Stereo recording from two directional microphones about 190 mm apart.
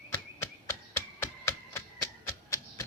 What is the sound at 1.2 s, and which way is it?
Typewriter, 15° left (ahead or behind).